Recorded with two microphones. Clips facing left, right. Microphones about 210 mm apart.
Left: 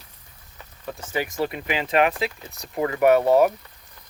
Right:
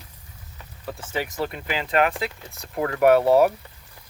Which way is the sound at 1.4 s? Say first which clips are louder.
Left 2 dB; 15° left (ahead or behind).